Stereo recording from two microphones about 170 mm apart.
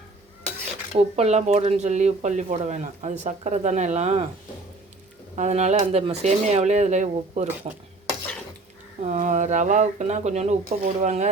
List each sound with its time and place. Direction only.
0.9 s speech: 40° right (ahead or behind)
5.4 s speech: 40° right (ahead or behind)
7.6 s speech: 30° right (ahead or behind)
9.0 s speech: 45° right (ahead or behind)